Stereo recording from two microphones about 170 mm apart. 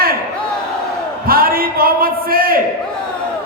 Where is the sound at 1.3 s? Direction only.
60° right (ahead or behind).